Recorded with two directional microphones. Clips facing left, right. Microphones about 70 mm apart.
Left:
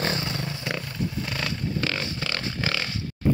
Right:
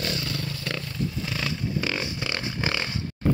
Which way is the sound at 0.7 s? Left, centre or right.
Centre.